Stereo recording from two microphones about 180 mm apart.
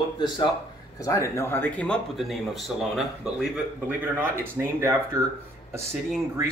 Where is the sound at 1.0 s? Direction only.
15° left (ahead or behind); by 5.2 s 10° right (ahead or behind).